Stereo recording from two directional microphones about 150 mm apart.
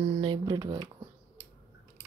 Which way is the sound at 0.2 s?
30° right (ahead or behind).